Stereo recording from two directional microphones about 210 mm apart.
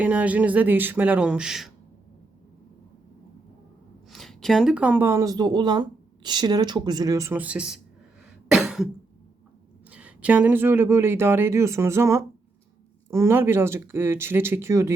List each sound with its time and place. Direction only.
0.0 s speech: 5° right (ahead or behind)
4.1 s speech: centre (ahead or behind)
8.5 s cough: centre (ahead or behind)
9.9 s speech: 5° right (ahead or behind)